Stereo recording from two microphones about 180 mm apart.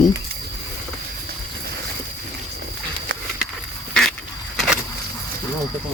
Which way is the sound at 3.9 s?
5° left (ahead or behind).